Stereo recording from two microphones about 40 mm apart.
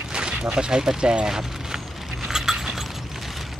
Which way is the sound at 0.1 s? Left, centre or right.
Right.